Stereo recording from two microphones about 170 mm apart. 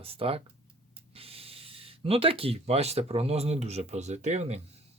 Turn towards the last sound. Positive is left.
turn(degrees=-40)  # may be behind; listen again after turning